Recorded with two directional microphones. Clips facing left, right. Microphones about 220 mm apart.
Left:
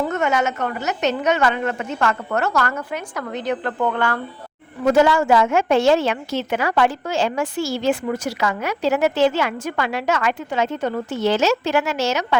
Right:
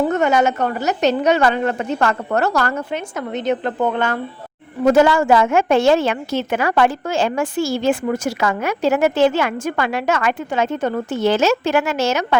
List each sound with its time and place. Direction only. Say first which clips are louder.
0.0 s a woman's voice: right 4 dB; 35° right (ahead or behind)
4.9 s a woman's voice: right 2 dB; 45° right (ahead or behind)